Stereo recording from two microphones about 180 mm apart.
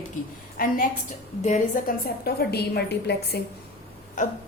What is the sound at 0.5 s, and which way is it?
Speech, 50° left (ahead or behind).